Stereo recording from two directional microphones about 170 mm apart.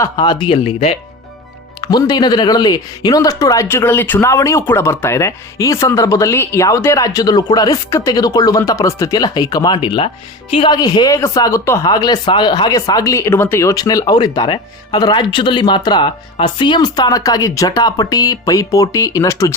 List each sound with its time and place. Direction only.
0.0 s speech: 25° left (ahead or behind)
1.8 s a woman's voice: 25° left (ahead or behind)